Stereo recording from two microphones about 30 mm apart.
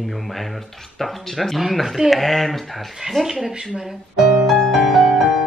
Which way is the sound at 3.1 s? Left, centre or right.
Centre.